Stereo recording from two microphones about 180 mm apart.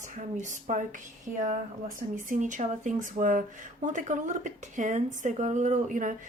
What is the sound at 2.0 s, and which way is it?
Speech, 45° right (ahead or behind).